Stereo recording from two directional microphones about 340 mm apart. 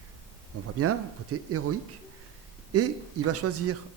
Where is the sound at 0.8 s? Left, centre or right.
Right.